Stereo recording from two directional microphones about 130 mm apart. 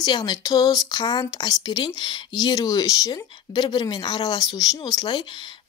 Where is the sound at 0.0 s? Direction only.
30° left (ahead or behind).